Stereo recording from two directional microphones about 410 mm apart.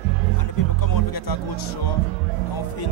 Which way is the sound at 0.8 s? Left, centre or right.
Left.